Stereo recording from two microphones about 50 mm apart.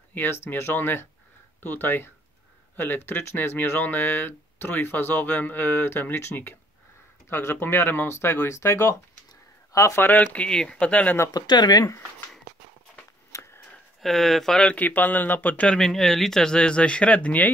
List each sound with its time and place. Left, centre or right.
0.1 s speech: left
7.2 s speech: left
9.8 s speech: left
10.2 s speech: left
10.5 s speech: centre
14.0 s speech: centre
14.8 s speech: left
15.8 s speech: centre; by 17.5 s left